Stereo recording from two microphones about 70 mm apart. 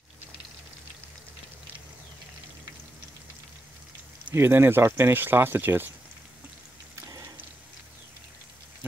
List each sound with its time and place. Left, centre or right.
4.3 s speech: right